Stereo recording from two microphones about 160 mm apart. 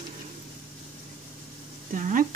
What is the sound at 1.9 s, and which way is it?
Speech, 55° right (ahead or behind).